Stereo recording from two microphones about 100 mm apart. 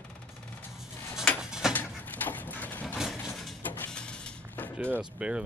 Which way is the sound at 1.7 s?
20° left (ahead or behind).